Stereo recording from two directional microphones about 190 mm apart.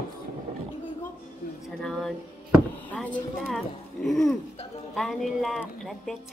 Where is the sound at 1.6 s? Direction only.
Centre (ahead or behind).